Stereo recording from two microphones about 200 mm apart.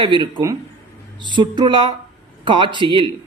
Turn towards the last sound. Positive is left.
turn(degrees=-25)  # may be behind; listen again after turning